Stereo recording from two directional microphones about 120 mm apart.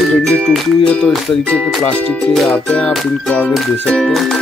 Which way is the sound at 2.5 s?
10° left (ahead or behind).